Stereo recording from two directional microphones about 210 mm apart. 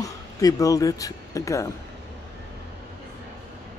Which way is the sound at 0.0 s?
15° left (ahead or behind).